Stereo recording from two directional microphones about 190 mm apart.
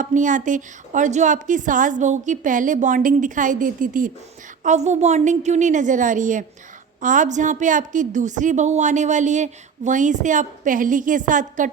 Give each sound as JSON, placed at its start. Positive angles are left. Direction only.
{"t": 0.0, "sound": "a woman's voice", "side_deg": -40}